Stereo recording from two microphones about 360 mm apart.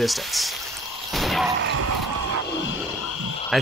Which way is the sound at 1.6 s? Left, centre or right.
Right.